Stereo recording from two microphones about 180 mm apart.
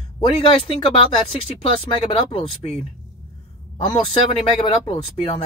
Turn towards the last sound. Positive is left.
turn(degrees=30)  # may be behind; listen again after turning